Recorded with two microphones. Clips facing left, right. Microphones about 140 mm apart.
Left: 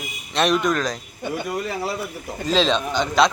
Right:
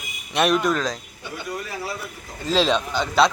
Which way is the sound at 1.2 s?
55° left (ahead or behind).